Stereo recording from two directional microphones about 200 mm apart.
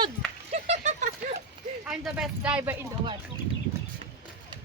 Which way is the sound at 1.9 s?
5° right (ahead or behind).